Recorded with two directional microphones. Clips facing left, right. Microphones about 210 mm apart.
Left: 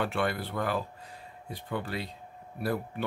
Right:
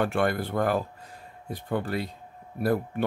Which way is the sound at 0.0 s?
50° right (ahead or behind).